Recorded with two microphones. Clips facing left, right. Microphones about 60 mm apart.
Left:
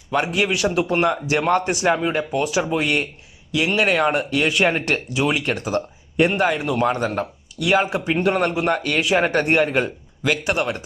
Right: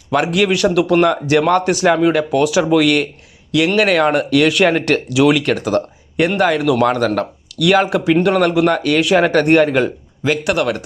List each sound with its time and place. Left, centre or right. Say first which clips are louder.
0.1 s speech: right 5 dB; right
2.7 s speech: right 8 dB; right
5.0 s speech: right 8 dB; right
10.4 s speech: right 5 dB; right